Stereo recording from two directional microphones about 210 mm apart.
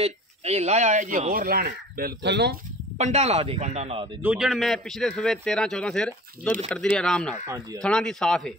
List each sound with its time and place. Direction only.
0.0 s speech: 30° right (ahead or behind); by 2.5 s 55° right (ahead or behind)
3.0 s speech: 35° right (ahead or behind)
4.2 s a man's voice: 5° right (ahead or behind)
7.4 s speech: 15° right (ahead or behind)
7.8 s a man's voice: 5° left (ahead or behind)